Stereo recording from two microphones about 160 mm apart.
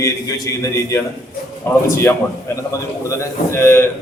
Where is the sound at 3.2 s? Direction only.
20° left (ahead or behind).